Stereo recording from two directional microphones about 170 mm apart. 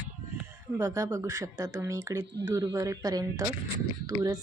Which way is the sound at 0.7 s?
15° right (ahead or behind).